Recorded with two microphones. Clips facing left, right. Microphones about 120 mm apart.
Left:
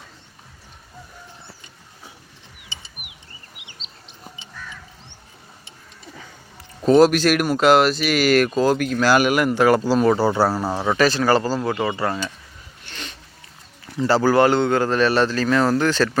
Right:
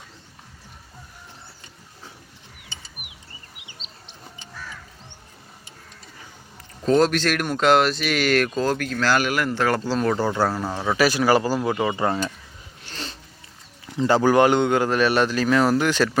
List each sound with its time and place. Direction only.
6.8 s speech: 10° left (ahead or behind)
10.8 s speech: 10° right (ahead or behind)
12.9 s a sound: 35° right (ahead or behind)
13.8 s speech: 20° right (ahead or behind)